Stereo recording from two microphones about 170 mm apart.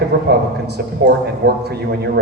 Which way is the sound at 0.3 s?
75° right (ahead or behind).